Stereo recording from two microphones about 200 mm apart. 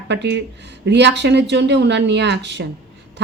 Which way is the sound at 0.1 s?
60° right (ahead or behind).